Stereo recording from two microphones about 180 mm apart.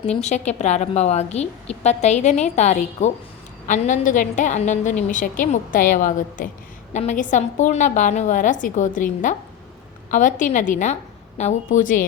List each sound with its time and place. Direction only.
0.0 s a woman's voice: 40° left (ahead or behind)